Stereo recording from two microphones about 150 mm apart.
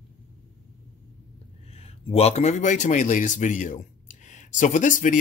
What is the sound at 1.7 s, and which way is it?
Speech, 45° left (ahead or behind).